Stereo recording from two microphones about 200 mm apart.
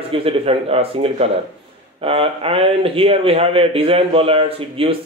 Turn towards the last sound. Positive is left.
turn(degrees=-25)  # may be behind; listen again after turning